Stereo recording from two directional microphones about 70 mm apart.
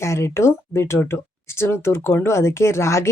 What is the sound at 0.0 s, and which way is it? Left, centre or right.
Speech, left.